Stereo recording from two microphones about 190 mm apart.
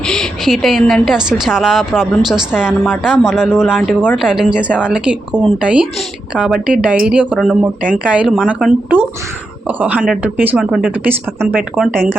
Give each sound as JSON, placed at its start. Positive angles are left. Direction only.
{"t": 0.1, "sound": "a woman's voice", "side_deg": 0}